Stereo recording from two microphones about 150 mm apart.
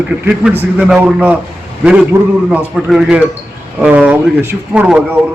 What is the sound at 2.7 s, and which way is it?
A man's voice, 5° right (ahead or behind).